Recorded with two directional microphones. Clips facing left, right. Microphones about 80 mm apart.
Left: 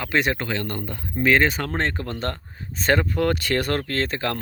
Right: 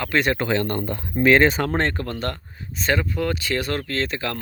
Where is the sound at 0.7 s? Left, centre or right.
Right.